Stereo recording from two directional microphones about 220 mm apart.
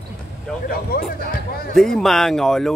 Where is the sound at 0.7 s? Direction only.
45° left (ahead or behind).